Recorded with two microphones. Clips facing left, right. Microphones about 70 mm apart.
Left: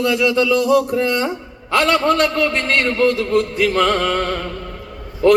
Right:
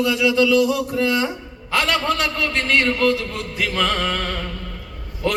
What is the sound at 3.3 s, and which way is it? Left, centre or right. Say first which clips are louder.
Speech: left 9 dB; left.